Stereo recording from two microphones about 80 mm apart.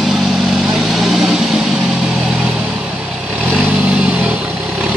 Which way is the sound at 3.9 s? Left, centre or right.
Right.